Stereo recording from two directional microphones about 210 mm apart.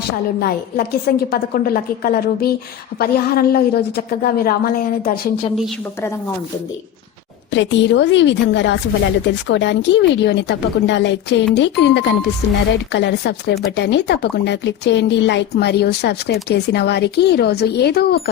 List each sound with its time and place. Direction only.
0.3 s speech: 45° left (ahead or behind)
5.5 s a woman's voice: centre (ahead or behind)
7.5 s speech: 60° left (ahead or behind)